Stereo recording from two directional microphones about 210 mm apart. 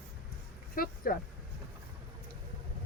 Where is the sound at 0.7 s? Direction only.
45° left (ahead or behind).